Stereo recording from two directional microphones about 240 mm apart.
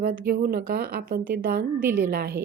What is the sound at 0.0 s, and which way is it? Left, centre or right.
A woman's voice, right.